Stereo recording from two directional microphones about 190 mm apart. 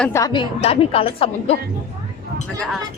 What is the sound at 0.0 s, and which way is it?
Speech, 15° left (ahead or behind).